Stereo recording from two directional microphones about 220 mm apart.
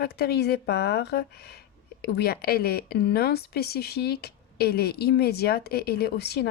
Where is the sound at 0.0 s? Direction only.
45° left (ahead or behind).